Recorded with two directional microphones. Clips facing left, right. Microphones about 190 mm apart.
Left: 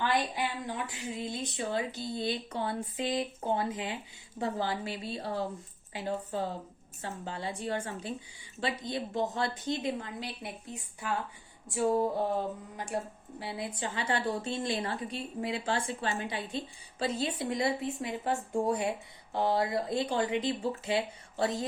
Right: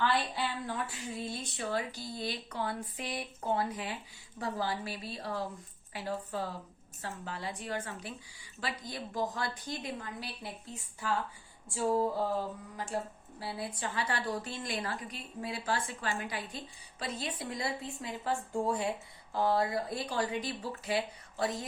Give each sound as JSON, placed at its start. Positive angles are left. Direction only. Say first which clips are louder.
{"t": 0.0, "sound": "a woman's voice", "louder": "left 1 dB", "side_deg": 15}